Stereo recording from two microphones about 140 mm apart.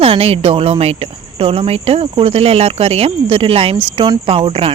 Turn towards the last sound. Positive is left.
turn(degrees=-40)  # may be behind; listen again after turning